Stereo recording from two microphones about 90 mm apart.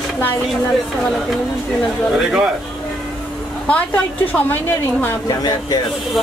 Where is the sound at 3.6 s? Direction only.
15° left (ahead or behind).